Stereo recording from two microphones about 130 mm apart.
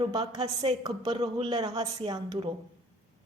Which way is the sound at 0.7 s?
45° right (ahead or behind).